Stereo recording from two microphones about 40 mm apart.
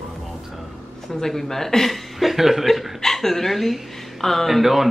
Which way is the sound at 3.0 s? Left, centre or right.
Centre.